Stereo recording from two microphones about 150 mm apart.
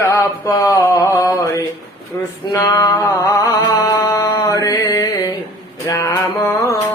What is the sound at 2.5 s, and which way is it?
Music, 20° left (ahead or behind).